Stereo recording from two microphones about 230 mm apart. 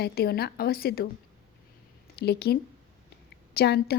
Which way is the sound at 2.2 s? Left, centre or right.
Left.